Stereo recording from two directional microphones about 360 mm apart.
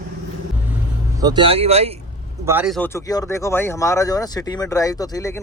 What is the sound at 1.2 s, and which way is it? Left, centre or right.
Speech, centre.